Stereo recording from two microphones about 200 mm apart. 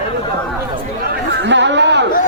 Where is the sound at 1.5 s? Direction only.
60° right (ahead or behind).